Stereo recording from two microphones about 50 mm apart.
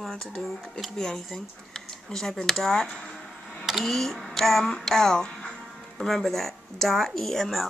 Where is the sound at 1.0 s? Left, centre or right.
Centre.